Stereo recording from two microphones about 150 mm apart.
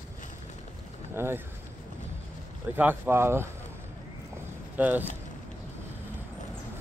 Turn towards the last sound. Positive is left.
turn(degrees=-10)  # may be behind; listen again after turning